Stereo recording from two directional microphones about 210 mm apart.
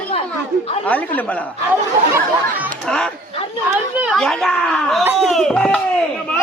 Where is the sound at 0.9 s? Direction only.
5° left (ahead or behind).